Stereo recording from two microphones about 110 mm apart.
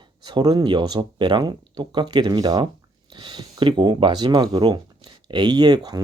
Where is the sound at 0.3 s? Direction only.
40° right (ahead or behind).